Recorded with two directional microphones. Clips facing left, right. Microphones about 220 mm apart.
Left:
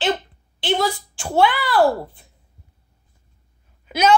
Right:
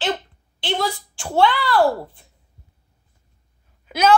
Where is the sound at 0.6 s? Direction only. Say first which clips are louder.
Left 3 dB; 5° left (ahead or behind).